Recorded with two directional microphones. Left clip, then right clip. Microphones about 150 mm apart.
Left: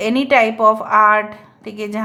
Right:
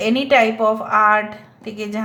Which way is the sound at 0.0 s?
30° left (ahead or behind).